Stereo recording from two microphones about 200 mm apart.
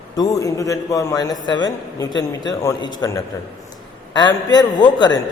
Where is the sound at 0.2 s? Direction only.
15° left (ahead or behind).